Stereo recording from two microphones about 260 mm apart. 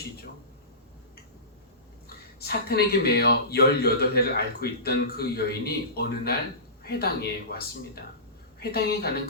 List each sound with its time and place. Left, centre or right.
2.4 s speech: left